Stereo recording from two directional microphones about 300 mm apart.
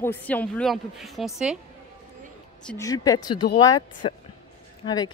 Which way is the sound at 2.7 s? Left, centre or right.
Centre.